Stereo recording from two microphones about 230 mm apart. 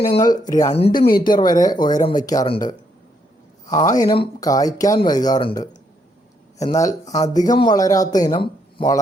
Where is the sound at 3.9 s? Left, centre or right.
Centre.